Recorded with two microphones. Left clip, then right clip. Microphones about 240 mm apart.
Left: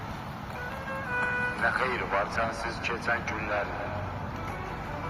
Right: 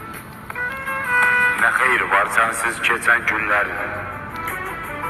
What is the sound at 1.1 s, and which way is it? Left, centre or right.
Speech, right.